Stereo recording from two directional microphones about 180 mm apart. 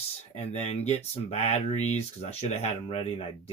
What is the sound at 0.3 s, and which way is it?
Speech, 35° left (ahead or behind).